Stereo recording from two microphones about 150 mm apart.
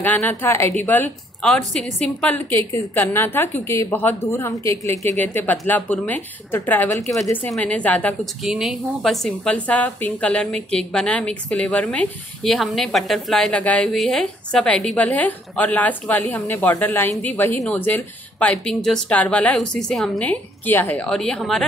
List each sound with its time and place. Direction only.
0.0 s a woman's voice: 10° left (ahead or behind)
2.7 s a woman's voice: 20° left (ahead or behind)
7.5 s a woman's voice: 10° left (ahead or behind)
8.5 s a woman's voice: centre (ahead or behind)